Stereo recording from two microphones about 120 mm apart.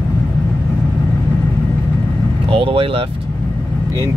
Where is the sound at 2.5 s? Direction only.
50° right (ahead or behind).